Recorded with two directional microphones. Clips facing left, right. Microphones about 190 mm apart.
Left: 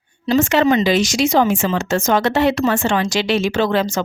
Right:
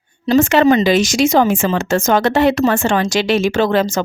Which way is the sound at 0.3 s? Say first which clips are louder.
Right 3 dB; 50° right (ahead or behind).